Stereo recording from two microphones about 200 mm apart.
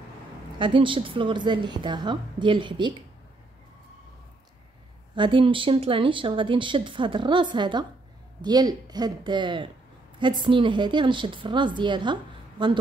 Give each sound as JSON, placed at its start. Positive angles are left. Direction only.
{"t": 0.6, "sound": "speech", "side_deg": -25}
{"t": 5.1, "sound": "speech", "side_deg": -25}